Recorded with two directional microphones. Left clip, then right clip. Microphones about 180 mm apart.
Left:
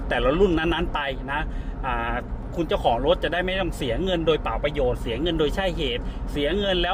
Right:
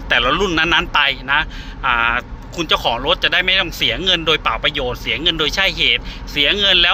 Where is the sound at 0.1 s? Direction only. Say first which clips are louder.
Right 5 dB; 20° left (ahead or behind).